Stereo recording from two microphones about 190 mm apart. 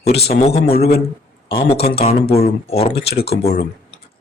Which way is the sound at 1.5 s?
30° left (ahead or behind).